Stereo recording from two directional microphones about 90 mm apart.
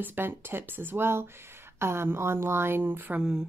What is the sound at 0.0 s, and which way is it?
A woman's voice, 20° right (ahead or behind).